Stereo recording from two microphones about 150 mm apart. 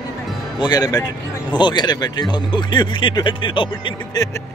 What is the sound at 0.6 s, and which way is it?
Speech, 25° left (ahead or behind).